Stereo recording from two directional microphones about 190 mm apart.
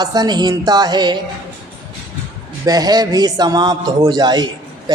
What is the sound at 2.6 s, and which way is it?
A man's voice, 20° right (ahead or behind).